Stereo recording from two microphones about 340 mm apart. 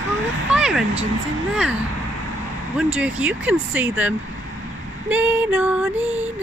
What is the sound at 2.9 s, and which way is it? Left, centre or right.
Speech, centre.